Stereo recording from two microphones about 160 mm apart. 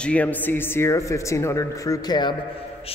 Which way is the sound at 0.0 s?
10° left (ahead or behind).